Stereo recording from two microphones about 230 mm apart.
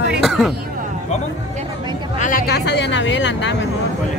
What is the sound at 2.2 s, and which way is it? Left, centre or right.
Speech, left.